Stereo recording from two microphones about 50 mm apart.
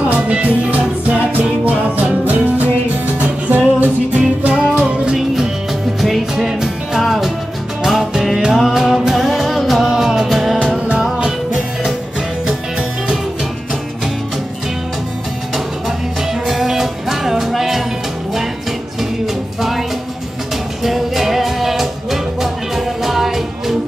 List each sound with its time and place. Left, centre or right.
0.1 s music: right
5.1 s music: centre
16.4 s music: centre
20.8 s music: centre